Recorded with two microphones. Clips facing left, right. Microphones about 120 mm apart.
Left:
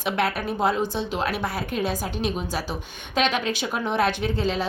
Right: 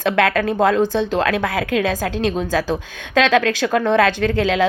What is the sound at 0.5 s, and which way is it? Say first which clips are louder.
A woman's voice: right 7 dB; 65° right (ahead or behind).